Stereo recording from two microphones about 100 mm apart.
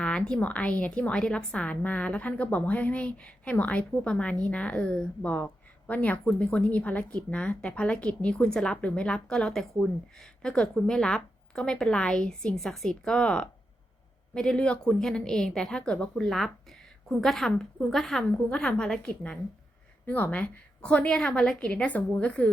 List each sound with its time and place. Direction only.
0.0 s a woman's voice: 10° left (ahead or behind)